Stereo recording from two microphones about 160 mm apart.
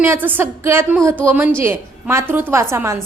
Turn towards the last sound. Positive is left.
turn(degrees=-15)  # may be behind; listen again after turning